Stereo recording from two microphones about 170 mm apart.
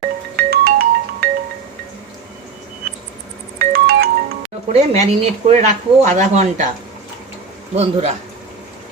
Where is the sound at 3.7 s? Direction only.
65° right (ahead or behind).